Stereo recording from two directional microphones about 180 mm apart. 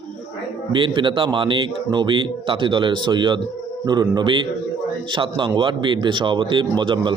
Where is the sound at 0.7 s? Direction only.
25° right (ahead or behind).